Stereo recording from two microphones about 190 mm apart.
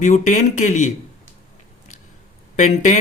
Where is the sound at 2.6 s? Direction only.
40° left (ahead or behind).